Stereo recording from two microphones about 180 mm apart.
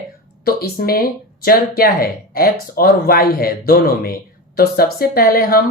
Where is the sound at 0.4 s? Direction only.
55° left (ahead or behind).